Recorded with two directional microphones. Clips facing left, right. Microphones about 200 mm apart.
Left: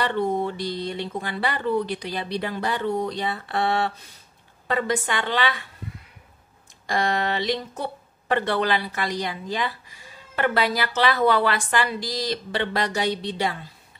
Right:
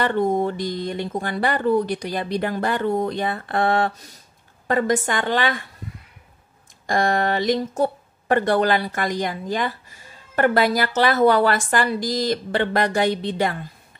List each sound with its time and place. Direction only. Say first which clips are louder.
0.0 s speech: right 4 dB; 45° right (ahead or behind)
6.9 s speech: right 4 dB; 50° right (ahead or behind)